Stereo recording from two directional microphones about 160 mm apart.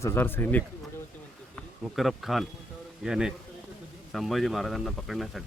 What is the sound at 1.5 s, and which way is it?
Speech, centre (ahead or behind).